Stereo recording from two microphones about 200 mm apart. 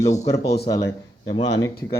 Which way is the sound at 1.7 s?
50° left (ahead or behind).